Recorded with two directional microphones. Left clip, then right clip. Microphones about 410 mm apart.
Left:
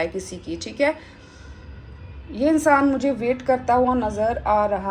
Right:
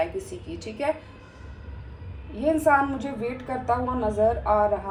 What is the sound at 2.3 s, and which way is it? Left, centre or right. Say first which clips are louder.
A woman's voice: left 3 dB; left.